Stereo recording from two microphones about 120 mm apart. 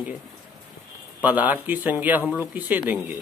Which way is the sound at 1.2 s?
15° right (ahead or behind).